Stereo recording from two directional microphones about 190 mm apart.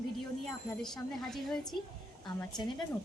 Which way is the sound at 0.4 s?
Centre (ahead or behind).